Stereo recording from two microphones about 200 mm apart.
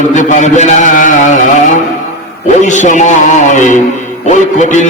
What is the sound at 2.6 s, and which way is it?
A man's voice, 40° left (ahead or behind).